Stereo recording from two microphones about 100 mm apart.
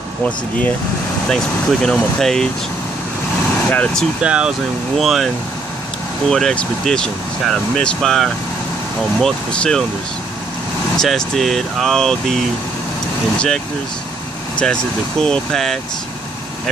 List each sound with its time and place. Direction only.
1.3 s speech: 5° left (ahead or behind)
3.7 s speech: 15° left (ahead or behind)
4.2 s speech: 10° right (ahead or behind); by 9.8 s 5° left (ahead or behind)
11.0 s speech: 5° left (ahead or behind)
14.6 s speech: 10° left (ahead or behind)